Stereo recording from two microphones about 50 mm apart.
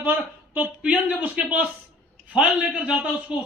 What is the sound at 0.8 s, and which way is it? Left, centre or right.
Speech, right.